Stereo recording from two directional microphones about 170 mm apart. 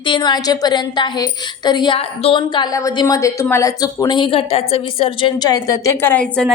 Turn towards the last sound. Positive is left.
turn(degrees=5)  # may be behind; listen again after turning